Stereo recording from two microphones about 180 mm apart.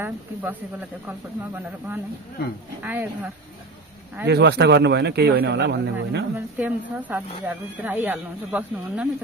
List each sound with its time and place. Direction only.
0.0 s speech: 10° right (ahead or behind)
4.3 s speech: 70° right (ahead or behind)
6.3 s speech: 10° right (ahead or behind)